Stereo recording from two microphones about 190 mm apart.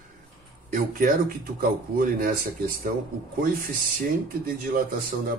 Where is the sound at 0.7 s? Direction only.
45° right (ahead or behind).